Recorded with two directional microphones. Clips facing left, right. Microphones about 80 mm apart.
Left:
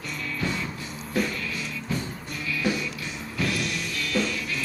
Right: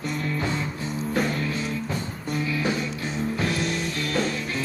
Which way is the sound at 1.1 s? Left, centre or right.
Right.